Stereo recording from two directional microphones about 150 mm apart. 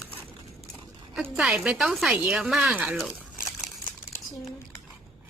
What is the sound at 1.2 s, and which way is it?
Speech, centre (ahead or behind).